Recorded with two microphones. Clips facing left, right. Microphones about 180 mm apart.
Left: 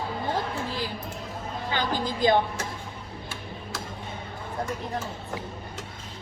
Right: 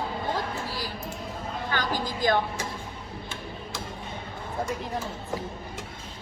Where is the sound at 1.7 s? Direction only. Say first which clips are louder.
Left 2 dB; 20° left (ahead or behind).